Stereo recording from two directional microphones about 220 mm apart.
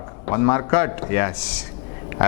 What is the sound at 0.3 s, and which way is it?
A man's voice, 20° left (ahead or behind).